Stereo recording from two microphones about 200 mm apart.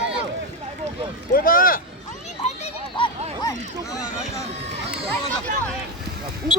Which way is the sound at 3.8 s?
15° left (ahead or behind).